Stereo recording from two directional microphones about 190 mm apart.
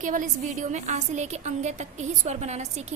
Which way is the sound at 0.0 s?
45° right (ahead or behind).